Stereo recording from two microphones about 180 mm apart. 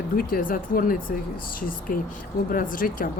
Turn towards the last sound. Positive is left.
turn(degrees=50)  # may be behind; listen again after turning